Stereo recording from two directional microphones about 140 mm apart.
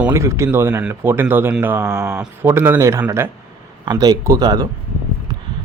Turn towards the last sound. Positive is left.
turn(degrees=-25)  # may be behind; listen again after turning